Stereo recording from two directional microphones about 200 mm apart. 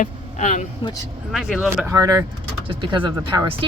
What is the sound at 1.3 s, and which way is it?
Speech, centre (ahead or behind).